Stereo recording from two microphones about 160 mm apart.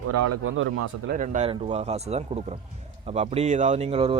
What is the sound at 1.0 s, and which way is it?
Speech, 55° right (ahead or behind).